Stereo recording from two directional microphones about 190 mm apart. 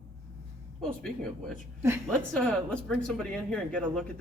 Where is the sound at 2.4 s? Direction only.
5° left (ahead or behind).